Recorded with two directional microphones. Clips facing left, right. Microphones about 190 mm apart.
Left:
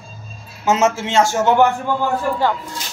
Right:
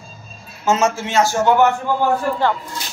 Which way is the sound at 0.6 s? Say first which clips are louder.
Left 1 dB; 20° left (ahead or behind).